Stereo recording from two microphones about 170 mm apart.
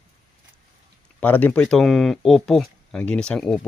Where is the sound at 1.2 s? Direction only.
10° left (ahead or behind).